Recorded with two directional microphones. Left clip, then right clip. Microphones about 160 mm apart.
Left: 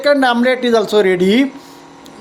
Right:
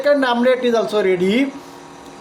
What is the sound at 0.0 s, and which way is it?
A woman's voice, 40° left (ahead or behind).